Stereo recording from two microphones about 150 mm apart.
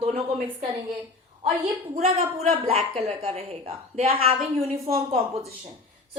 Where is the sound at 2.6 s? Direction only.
40° right (ahead or behind).